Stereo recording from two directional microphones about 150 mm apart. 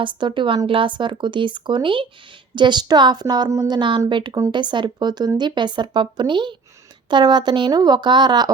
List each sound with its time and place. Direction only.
0.0 s a woman's voice: 30° right (ahead or behind)